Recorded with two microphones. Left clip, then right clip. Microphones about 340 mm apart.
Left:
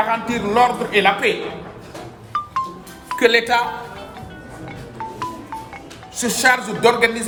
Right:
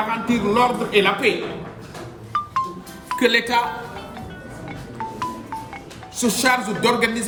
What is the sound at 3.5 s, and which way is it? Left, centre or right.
Speech, centre.